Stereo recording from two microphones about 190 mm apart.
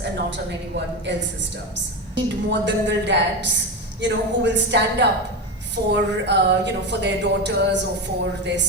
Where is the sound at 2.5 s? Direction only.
70° right (ahead or behind).